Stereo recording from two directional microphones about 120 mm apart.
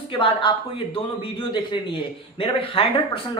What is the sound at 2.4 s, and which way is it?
A woman's voice, 50° left (ahead or behind).